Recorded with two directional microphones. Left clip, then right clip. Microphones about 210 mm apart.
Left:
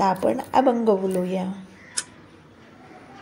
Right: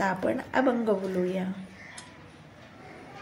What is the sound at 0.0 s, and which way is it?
Speech, 25° left (ahead or behind).